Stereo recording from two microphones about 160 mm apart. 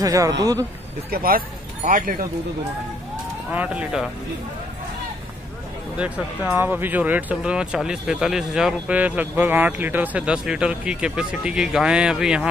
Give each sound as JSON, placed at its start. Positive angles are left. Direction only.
{"t": 0.0, "sound": "a man's voice", "side_deg": -20}
{"t": 1.1, "sound": "speech", "side_deg": -65}
{"t": 3.5, "sound": "speech", "side_deg": -5}
{"t": 5.9, "sound": "speech", "side_deg": -10}